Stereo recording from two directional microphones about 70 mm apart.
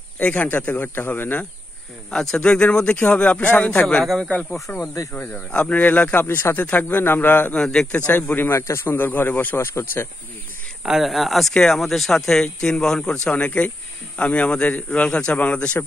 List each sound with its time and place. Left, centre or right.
0.2 s speech: left
2.0 s speech: centre
3.8 s speech: centre; by 6.2 s left
6.2 s speech: left
6.6 s speech: left
7.5 s speech: centre
7.9 s speech: left
10.8 s speech: centre